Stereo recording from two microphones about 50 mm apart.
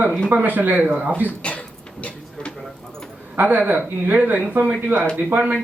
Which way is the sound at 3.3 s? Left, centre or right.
Right.